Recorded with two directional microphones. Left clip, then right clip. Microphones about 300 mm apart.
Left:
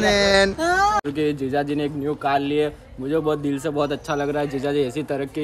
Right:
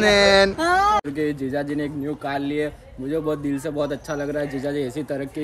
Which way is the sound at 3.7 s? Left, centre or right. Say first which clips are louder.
Left 3 dB; centre.